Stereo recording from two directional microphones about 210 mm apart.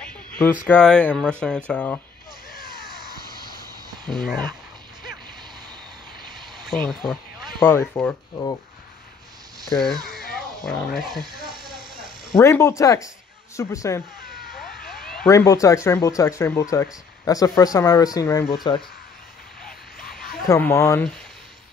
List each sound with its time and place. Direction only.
0.4 s speech: 5° left (ahead or behind)
4.1 s speech: centre (ahead or behind)
6.6 s speech: centre (ahead or behind)
9.7 s speech: 15° left (ahead or behind)
10.3 s a sound: centre (ahead or behind)
11.1 s snake: 20° right (ahead or behind)
12.4 s speech: 15° left (ahead or behind)
15.2 s speech: 15° left (ahead or behind)
20.0 s a sound: 45° left (ahead or behind)
20.4 s speech: 15° left (ahead or behind)